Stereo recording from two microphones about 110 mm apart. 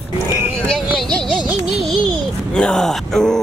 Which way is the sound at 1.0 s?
10° left (ahead or behind).